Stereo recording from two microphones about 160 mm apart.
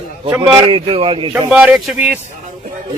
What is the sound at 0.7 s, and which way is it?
Speech, 35° right (ahead or behind).